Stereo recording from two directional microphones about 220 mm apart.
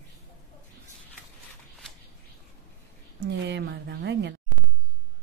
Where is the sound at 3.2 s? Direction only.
50° right (ahead or behind).